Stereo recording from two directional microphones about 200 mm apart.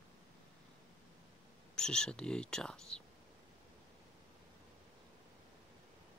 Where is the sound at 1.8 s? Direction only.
5° left (ahead or behind).